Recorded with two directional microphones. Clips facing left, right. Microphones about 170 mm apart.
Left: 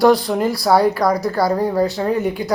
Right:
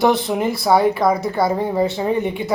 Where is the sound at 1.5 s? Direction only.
25° right (ahead or behind).